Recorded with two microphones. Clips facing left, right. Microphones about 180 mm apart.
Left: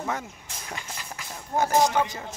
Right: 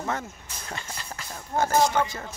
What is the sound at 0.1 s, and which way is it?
Speech, 10° left (ahead or behind).